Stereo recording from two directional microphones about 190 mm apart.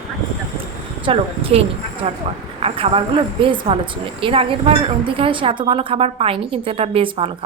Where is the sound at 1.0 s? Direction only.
30° right (ahead or behind).